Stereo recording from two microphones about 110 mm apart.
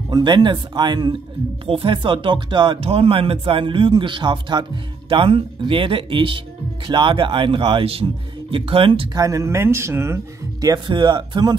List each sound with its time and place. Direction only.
0.1 s speech: 40° right (ahead or behind)
1.7 s speech: 55° right (ahead or behind)
9.1 s speech: 30° right (ahead or behind)
10.6 s speech: 40° right (ahead or behind)